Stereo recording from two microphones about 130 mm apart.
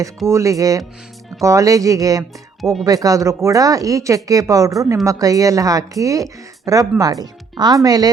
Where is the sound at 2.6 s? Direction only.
Centre (ahead or behind).